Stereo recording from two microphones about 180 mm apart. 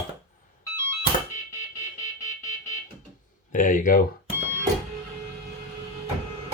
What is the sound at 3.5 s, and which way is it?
Speech, 45° left (ahead or behind).